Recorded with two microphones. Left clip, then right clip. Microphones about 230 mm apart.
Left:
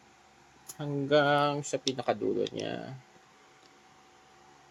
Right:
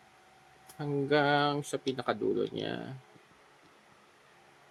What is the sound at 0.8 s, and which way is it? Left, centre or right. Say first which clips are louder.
Speech: left 2 dB; centre.